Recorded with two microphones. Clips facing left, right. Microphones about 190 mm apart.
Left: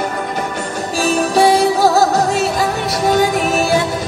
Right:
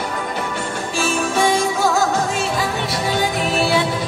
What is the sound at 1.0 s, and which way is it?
Music, 40° left (ahead or behind).